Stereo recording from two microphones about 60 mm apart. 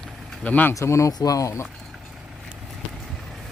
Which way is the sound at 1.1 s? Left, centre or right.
Left.